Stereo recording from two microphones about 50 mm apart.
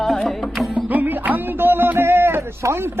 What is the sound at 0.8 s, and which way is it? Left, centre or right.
Speech, right.